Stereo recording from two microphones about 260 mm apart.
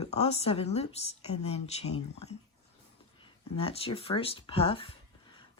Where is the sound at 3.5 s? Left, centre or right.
Left.